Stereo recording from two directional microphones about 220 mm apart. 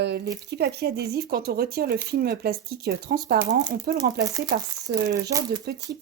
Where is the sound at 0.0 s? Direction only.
50° right (ahead or behind).